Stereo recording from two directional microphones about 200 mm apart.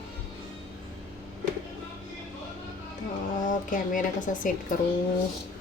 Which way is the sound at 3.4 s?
40° left (ahead or behind).